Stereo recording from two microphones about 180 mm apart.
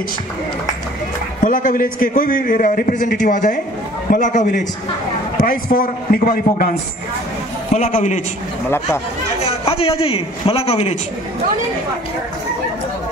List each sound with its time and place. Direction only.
1.4 s a man's voice: 50° left (ahead or behind)
7.7 s a man's voice: 40° left (ahead or behind)
8.6 s speech: 15° left (ahead or behind)
9.4 s a man's voice: 35° left (ahead or behind)